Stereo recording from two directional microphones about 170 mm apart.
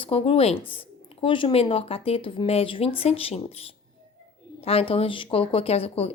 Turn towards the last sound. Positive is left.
turn(degrees=35)  # may be behind; listen again after turning